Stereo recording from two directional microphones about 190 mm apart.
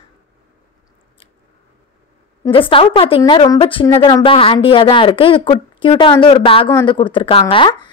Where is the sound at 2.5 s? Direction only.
25° left (ahead or behind).